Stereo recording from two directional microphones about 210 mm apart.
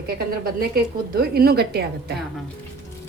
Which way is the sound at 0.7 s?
45° right (ahead or behind).